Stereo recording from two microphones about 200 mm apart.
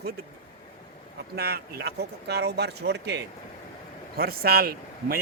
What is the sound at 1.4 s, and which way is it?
A man's voice, 55° right (ahead or behind).